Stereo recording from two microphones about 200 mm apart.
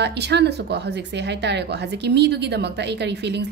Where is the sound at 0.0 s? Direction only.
55° right (ahead or behind).